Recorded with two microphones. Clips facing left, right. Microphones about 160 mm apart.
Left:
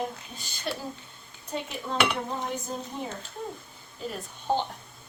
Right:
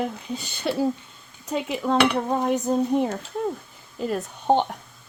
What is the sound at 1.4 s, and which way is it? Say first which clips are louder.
Dishes: right 9 dB; 90° right.